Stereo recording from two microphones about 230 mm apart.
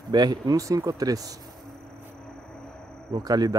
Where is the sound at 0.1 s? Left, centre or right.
Centre.